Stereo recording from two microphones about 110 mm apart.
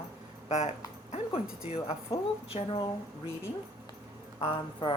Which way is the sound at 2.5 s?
80° left.